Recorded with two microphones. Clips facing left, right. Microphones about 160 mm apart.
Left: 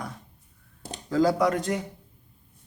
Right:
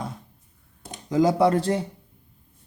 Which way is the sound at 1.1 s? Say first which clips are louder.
Right 3 dB; 20° right (ahead or behind).